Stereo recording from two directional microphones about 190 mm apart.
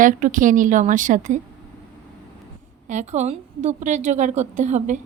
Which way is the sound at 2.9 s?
40° right (ahead or behind).